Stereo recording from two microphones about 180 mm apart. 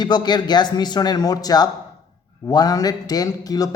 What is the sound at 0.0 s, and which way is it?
A woman's voice, 25° left (ahead or behind).